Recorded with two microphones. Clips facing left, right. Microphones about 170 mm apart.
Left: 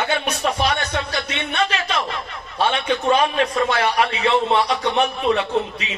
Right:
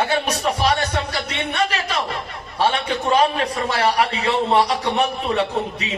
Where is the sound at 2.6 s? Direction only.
35° right (ahead or behind).